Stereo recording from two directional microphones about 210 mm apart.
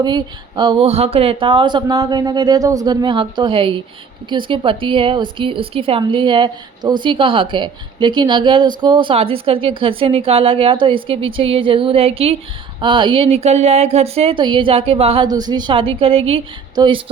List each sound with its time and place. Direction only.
0.0 s a woman's voice: 20° right (ahead or behind)